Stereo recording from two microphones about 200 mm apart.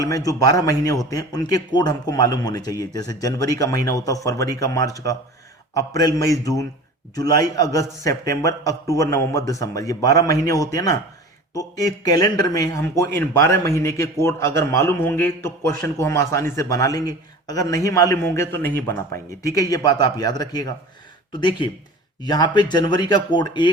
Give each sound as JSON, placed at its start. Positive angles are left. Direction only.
{"t": 0.0, "sound": "a man's voice", "side_deg": 20}